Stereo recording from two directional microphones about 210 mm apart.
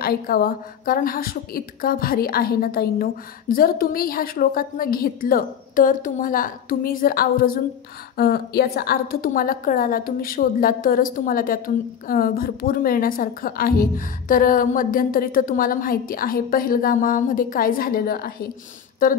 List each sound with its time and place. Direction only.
0.0 s a woman's voice: 45° left (ahead or behind)